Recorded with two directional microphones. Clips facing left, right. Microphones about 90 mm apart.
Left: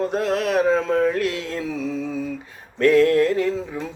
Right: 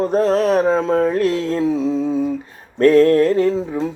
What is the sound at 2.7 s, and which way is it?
Mantra, 35° right (ahead or behind).